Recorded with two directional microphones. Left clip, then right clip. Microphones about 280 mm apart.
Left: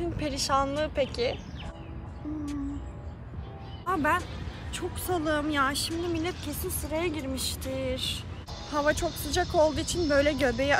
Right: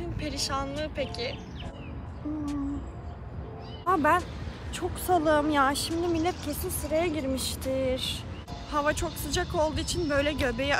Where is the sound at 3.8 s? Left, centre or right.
Centre.